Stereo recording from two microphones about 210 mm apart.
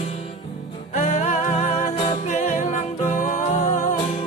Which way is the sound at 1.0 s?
35° left (ahead or behind).